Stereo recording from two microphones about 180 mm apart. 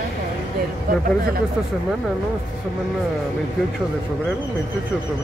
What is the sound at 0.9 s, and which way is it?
Speech, 55° right (ahead or behind).